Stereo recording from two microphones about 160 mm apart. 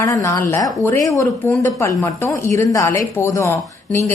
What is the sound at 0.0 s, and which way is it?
A woman's voice, 20° left (ahead or behind).